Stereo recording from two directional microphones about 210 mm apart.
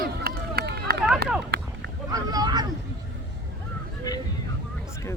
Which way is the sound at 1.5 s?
50° right (ahead or behind).